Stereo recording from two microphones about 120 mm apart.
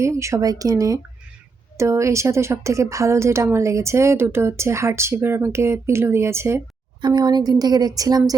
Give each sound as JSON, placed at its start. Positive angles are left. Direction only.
{"t": 0.0, "sound": "speech", "side_deg": -25}
{"t": 7.0, "sound": "speech", "side_deg": -35}